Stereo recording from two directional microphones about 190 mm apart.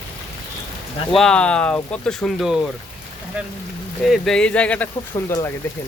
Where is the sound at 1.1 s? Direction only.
5° left (ahead or behind).